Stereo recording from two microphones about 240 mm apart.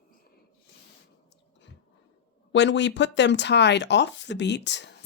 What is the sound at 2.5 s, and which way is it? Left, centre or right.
Speech, left.